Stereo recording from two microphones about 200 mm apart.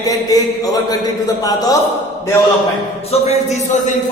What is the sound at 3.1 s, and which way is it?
Speech, 35° left (ahead or behind).